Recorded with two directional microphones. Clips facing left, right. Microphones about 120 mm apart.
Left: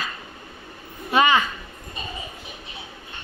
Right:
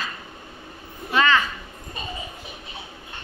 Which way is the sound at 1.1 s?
15° left (ahead or behind).